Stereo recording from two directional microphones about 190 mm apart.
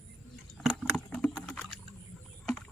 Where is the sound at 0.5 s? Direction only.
Centre (ahead or behind).